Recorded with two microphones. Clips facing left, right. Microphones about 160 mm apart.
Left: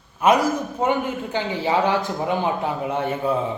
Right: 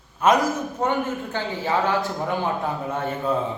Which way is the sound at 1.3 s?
15° left (ahead or behind).